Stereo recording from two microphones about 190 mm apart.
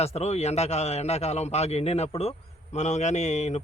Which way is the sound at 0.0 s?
35° left (ahead or behind).